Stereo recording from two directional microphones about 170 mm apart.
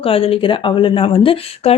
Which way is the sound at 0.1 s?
35° left (ahead or behind).